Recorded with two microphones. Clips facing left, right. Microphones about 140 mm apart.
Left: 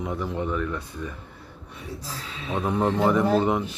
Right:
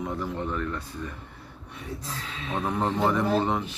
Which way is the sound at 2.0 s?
Centre (ahead or behind).